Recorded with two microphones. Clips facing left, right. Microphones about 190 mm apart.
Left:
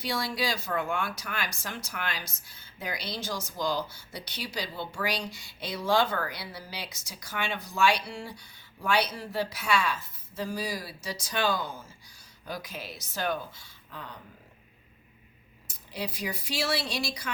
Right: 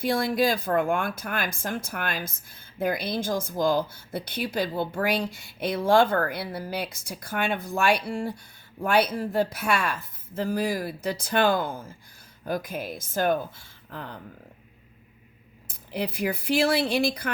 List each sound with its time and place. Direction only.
0.0 s speech: 50° right (ahead or behind)
15.6 s speech: 55° right (ahead or behind)